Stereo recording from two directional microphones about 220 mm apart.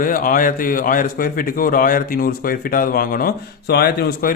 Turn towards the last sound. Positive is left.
turn(degrees=45)  # may be behind; listen again after turning